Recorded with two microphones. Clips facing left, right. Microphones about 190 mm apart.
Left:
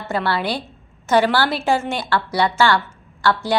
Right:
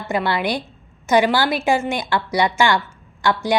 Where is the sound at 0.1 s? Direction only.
15° right (ahead or behind).